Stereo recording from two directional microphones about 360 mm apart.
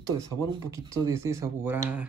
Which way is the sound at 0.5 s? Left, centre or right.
Centre.